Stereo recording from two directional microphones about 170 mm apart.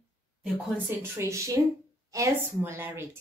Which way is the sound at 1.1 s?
15° right (ahead or behind).